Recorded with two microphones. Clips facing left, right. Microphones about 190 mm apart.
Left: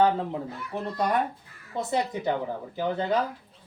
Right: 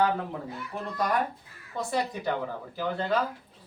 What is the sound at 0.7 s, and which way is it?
A man's voice, 25° left (ahead or behind).